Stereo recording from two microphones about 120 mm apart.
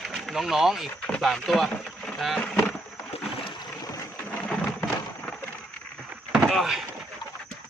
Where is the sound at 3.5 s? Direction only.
30° left (ahead or behind).